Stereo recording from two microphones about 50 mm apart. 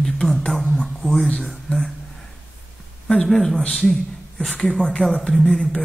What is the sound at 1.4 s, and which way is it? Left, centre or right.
Speech, centre.